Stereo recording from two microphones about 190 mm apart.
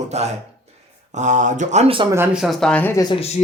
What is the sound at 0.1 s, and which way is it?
Speech, 35° right (ahead or behind).